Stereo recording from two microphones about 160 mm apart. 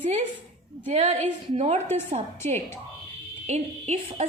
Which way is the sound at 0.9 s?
45° right (ahead or behind).